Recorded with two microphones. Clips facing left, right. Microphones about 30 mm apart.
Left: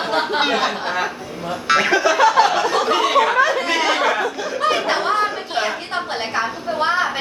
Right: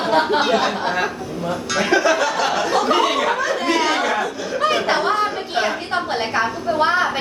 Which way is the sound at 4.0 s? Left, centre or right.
Centre.